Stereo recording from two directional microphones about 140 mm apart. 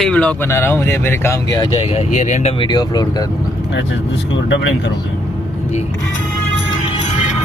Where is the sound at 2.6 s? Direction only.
30° left (ahead or behind).